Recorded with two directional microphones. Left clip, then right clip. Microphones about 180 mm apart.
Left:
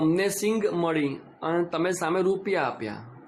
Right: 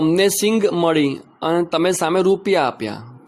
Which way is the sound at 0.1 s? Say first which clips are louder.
Right 8 dB; 50° right (ahead or behind).